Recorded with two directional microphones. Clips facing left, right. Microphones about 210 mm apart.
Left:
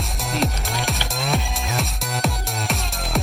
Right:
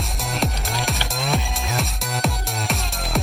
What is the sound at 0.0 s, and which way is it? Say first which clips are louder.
Music: left 2 dB; centre (ahead or behind).